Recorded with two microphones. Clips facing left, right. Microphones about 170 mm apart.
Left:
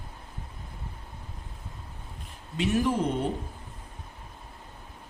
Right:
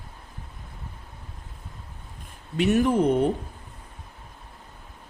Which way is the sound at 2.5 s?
60° right (ahead or behind).